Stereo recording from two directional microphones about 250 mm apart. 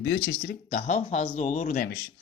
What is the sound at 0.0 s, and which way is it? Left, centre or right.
Speech, left.